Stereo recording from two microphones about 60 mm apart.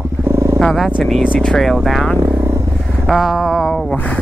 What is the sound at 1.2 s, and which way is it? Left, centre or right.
Speech, left.